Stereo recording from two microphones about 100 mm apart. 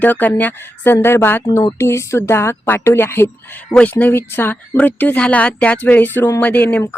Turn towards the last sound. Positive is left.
turn(degrees=15)  # may be behind; listen again after turning